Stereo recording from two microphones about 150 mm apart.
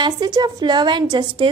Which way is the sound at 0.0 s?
25° right (ahead or behind).